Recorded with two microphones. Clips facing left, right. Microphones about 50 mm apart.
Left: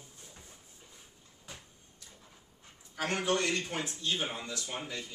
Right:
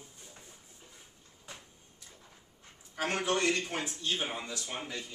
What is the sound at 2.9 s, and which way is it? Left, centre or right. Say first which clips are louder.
Speech: even; centre.